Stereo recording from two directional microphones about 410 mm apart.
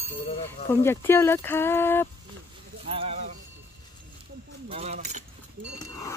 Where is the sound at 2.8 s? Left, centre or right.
Centre.